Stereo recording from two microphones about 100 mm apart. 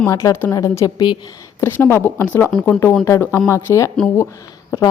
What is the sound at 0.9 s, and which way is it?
Speech, 50° left (ahead or behind).